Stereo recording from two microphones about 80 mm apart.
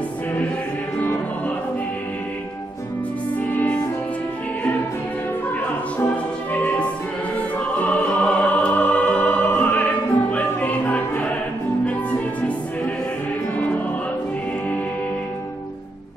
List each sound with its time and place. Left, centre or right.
3.5 s music: centre
5.9 s music: left